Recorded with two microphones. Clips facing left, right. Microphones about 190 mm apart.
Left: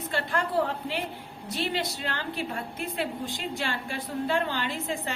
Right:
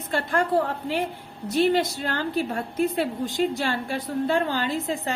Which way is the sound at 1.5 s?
45° right (ahead or behind).